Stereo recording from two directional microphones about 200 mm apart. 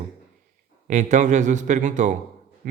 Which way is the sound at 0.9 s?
35° right (ahead or behind).